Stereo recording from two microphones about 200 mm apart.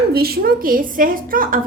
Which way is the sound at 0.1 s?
50° right (ahead or behind).